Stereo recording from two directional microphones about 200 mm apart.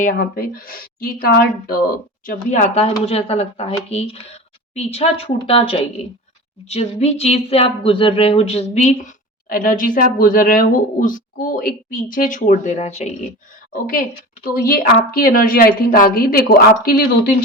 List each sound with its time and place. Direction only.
0.0 s a woman's voice: 45° left (ahead or behind)
14.6 s a woman's voice: 45° left (ahead or behind)